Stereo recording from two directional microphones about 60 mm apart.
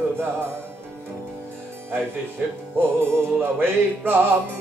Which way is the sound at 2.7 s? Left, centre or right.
Right.